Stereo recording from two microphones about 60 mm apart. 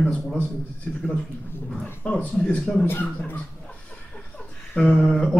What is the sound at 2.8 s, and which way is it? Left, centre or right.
Speech, left.